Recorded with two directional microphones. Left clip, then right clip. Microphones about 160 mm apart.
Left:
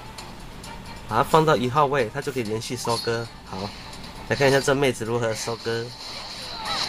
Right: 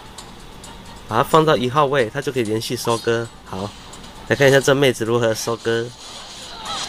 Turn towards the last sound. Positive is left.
turn(degrees=10)  # may be behind; listen again after turning